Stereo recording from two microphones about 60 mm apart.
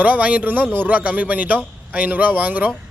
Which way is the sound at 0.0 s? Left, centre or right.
Right.